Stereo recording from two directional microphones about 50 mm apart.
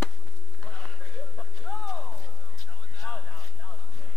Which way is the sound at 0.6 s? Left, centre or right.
Centre.